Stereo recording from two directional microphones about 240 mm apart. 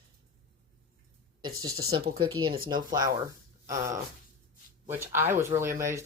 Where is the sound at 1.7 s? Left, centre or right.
Right.